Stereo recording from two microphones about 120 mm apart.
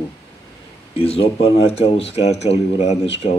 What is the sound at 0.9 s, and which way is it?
Speech, 55° left (ahead or behind).